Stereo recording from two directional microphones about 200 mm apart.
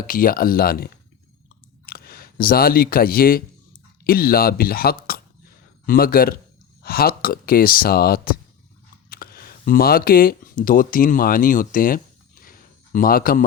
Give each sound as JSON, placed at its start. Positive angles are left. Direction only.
{"t": 0.1, "sound": "speech", "side_deg": 45}
{"t": 1.9, "sound": "speech", "side_deg": 50}